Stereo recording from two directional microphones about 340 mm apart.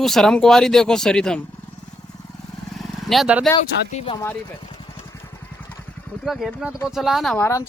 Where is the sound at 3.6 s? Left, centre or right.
Centre.